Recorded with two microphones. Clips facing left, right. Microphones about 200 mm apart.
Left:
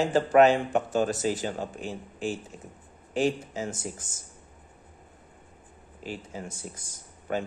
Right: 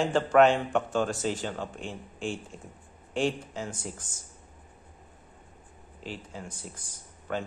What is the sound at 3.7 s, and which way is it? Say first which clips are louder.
Speech: left 3 dB; 20° left (ahead or behind).